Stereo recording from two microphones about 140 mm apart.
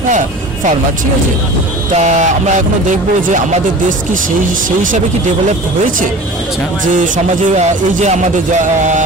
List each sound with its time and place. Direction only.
2.0 s music: 60° right (ahead or behind)
6.8 s music: 65° right (ahead or behind)